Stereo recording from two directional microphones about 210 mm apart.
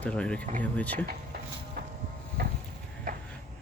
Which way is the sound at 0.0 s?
5° left (ahead or behind).